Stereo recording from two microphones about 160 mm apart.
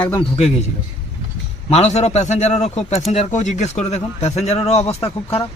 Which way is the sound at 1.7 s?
45° left (ahead or behind).